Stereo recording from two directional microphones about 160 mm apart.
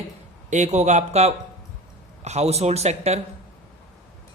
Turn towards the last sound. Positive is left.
turn(degrees=-45)  # may be behind; listen again after turning